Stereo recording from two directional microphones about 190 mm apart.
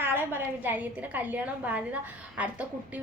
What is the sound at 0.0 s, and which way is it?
A woman's voice, 10° right (ahead or behind).